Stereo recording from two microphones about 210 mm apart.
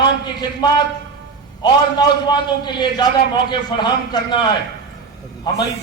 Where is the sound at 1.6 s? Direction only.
20° left (ahead or behind).